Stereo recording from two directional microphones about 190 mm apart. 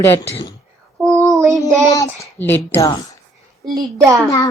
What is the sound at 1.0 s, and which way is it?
Child singing, 15° right (ahead or behind).